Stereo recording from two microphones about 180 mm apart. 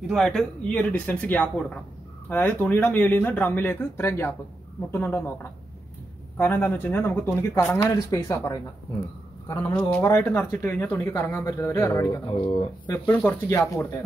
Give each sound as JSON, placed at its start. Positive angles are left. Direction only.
{"t": 0.1, "sound": "speech", "side_deg": 0}
{"t": 6.3, "sound": "speech", "side_deg": 10}
{"t": 9.8, "sound": "speech", "side_deg": 5}
{"t": 12.9, "sound": "speech", "side_deg": 10}